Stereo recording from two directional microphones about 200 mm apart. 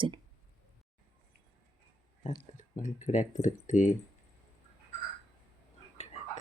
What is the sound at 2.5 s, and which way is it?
Speech, 40° left (ahead or behind).